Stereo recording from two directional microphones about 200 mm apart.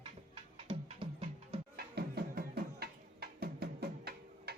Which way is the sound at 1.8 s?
50° right (ahead or behind).